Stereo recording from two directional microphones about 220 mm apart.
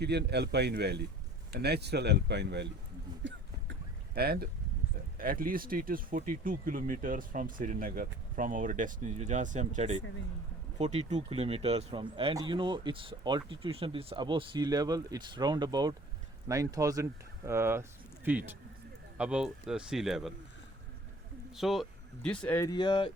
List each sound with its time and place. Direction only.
0.0 s speech: 50° right (ahead or behind)
3.2 s a sound: 50° right (ahead or behind)
5.1 s speech: 40° right (ahead or behind); by 20.3 s centre (ahead or behind)
21.5 s speech: centre (ahead or behind); by 23.1 s 20° left (ahead or behind)